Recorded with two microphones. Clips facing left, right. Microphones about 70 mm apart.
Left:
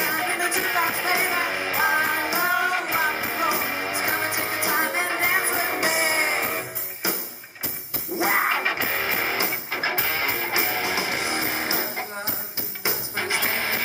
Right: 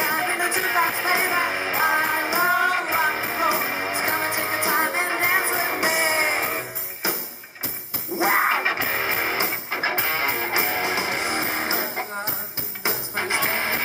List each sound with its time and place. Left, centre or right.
0.0 s music: centre
8.2 s music: centre
12.8 s music: right